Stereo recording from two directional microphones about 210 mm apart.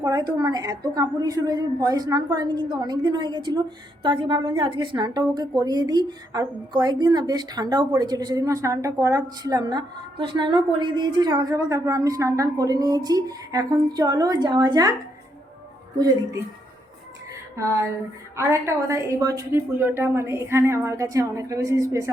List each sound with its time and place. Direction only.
0.0 s a woman's voice: 15° right (ahead or behind)
16.0 s a woman's voice: 15° right (ahead or behind)
18.3 s a woman's voice: 15° right (ahead or behind)